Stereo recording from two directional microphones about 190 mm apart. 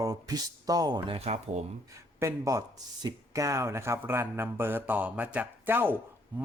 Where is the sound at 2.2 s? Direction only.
15° right (ahead or behind).